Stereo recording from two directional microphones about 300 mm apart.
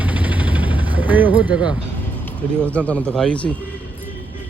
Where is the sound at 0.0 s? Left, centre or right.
Centre.